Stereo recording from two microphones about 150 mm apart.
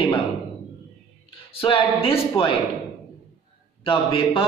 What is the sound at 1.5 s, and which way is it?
A man's voice, 35° left (ahead or behind).